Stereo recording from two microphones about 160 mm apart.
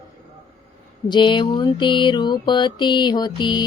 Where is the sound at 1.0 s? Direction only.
30° left (ahead or behind).